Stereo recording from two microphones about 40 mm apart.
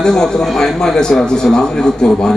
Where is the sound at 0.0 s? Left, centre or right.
Centre.